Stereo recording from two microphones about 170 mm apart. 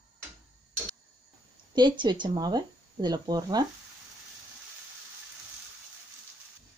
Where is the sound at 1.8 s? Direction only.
25° right (ahead or behind).